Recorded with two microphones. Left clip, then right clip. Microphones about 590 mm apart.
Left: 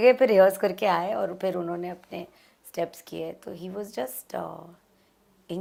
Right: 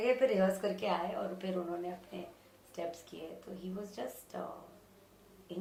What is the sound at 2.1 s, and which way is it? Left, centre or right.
A woman's voice, left.